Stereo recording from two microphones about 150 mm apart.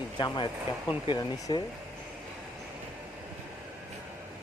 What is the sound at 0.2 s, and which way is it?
Speech, 30° left (ahead or behind).